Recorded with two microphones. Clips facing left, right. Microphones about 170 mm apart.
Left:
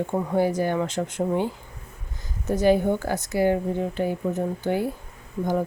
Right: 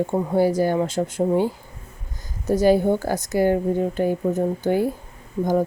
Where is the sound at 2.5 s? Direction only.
35° right (ahead or behind).